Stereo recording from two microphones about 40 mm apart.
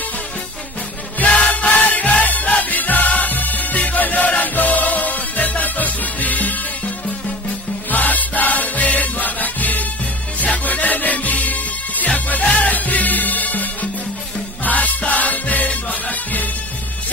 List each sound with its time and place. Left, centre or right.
1.2 s music: left
7.9 s music: left